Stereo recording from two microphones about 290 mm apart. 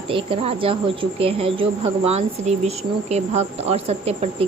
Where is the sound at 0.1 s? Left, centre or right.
Centre.